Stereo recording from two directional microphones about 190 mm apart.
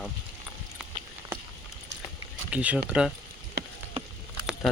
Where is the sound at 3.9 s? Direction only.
30° right (ahead or behind).